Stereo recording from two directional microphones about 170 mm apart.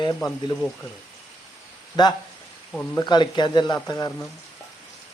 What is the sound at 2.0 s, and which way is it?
Speech, 25° left (ahead or behind).